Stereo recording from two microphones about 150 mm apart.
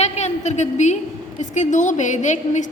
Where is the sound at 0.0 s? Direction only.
50° left (ahead or behind).